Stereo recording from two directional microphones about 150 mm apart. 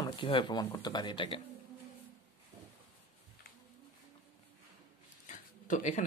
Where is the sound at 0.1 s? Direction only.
35° left (ahead or behind).